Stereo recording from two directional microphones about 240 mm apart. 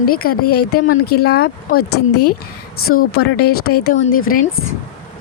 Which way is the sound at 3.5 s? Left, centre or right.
Left.